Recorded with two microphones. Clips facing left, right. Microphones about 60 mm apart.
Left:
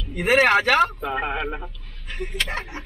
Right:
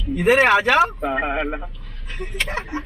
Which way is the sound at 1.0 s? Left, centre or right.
Right.